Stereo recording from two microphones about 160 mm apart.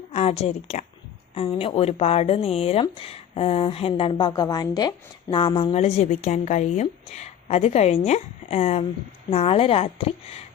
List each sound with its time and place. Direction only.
0.1 s a woman's voice: 40° left (ahead or behind)